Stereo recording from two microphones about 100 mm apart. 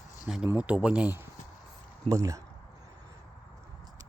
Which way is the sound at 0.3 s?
10° right (ahead or behind).